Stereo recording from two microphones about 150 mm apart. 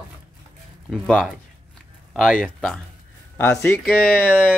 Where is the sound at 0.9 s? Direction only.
Centre (ahead or behind).